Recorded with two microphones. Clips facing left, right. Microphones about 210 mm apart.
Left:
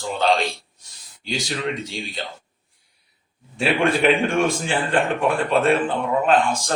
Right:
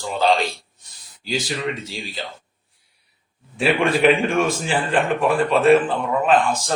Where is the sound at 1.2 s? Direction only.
5° right (ahead or behind).